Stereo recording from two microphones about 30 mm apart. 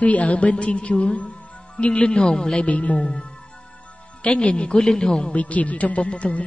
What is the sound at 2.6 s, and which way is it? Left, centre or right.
Speech, left.